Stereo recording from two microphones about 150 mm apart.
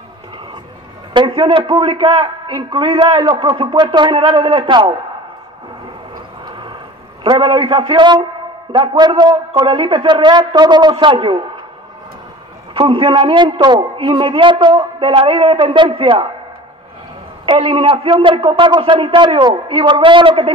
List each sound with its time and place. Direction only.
1.1 s a man's voice: 30° right (ahead or behind)
6.1 s a sound: 30° right (ahead or behind)
7.2 s a man's voice: 35° right (ahead or behind)
12.7 s a man's voice: 40° right (ahead or behind)
17.5 s a man's voice: 35° right (ahead or behind)